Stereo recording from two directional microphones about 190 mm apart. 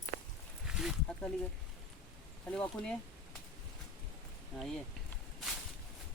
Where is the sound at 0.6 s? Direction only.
Centre (ahead or behind).